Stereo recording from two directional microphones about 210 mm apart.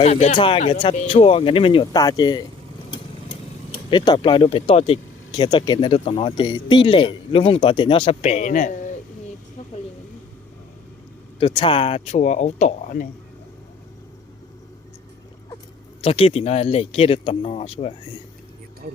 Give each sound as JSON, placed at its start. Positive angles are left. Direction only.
{"t": 0.0, "sound": "speech", "side_deg": 30}
{"t": 3.7, "sound": "speech", "side_deg": 20}
{"t": 11.3, "sound": "speech", "side_deg": 25}
{"t": 16.0, "sound": "speech", "side_deg": 25}